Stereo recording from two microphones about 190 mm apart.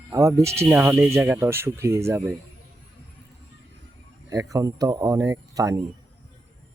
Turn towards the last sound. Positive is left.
turn(degrees=-20)  # may be behind; listen again after turning